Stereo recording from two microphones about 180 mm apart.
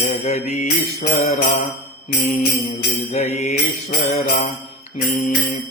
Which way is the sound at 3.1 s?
40° left (ahead or behind).